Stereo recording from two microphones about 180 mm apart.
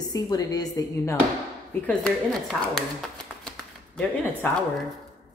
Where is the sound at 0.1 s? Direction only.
20° left (ahead or behind).